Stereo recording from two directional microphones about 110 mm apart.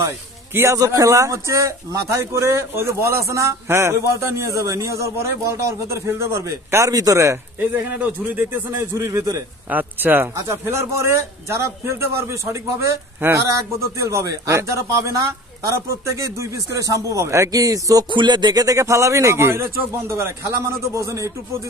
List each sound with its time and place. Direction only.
0.6 s a man's voice: 30° right (ahead or behind)
18.1 s a man's voice: 45° right (ahead or behind); by 21.3 s 30° right (ahead or behind)